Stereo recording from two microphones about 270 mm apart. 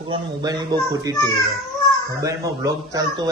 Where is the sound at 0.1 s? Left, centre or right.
Centre.